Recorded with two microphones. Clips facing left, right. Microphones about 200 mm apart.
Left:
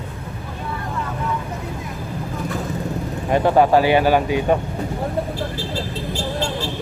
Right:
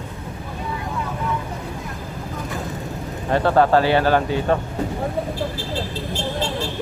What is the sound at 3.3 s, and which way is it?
Speech, 15° left (ahead or behind).